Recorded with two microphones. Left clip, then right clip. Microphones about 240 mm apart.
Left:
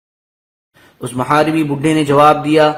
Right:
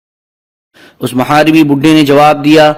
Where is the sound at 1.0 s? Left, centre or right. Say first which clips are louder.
Right 5 dB; right.